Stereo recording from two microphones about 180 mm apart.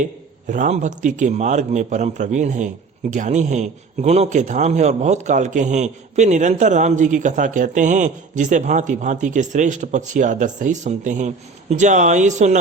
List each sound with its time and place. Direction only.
0.0 s speech: 45° right (ahead or behind)